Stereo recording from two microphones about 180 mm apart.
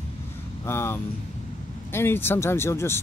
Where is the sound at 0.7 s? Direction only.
15° left (ahead or behind).